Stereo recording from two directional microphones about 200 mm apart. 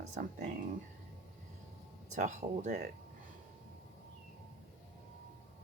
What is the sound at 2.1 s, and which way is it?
Speech, 35° right (ahead or behind).